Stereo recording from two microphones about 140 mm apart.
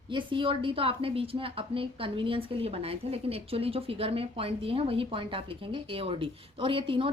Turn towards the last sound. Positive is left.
turn(degrees=-40)  # may be behind; listen again after turning